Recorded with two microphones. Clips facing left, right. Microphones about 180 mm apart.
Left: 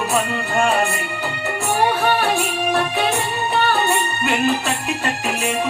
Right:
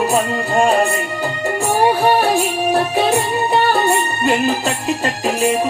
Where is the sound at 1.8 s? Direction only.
35° right (ahead or behind).